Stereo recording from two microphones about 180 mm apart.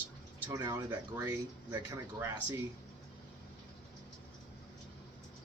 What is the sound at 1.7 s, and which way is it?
Speech, 20° right (ahead or behind).